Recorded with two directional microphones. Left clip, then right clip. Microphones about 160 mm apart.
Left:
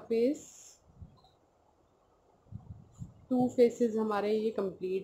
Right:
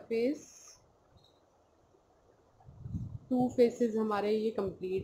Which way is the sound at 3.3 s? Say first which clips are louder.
Left 1 dB; centre (ahead or behind).